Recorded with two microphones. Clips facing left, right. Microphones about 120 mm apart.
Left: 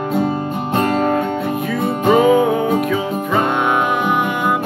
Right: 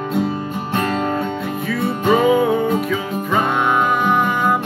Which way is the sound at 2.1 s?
Centre (ahead or behind).